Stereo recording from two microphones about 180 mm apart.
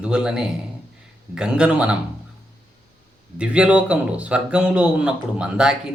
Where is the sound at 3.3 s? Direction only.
5° right (ahead or behind).